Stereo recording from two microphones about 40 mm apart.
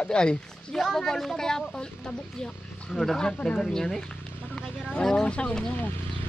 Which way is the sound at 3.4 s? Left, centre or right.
Centre.